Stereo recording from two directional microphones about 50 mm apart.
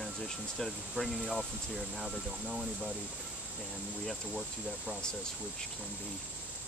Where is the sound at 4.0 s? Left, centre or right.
Centre.